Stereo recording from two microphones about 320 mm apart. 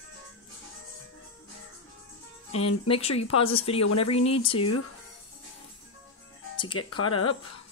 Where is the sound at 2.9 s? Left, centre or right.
Centre.